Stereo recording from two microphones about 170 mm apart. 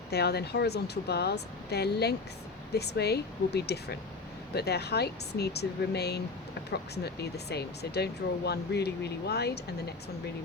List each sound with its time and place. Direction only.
0.1 s speech: 70° left (ahead or behind)